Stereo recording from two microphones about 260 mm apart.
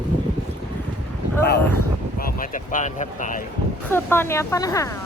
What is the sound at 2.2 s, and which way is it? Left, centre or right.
Speech, left.